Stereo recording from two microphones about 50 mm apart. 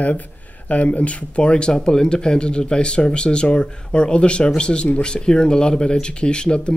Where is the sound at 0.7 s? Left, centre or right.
Left.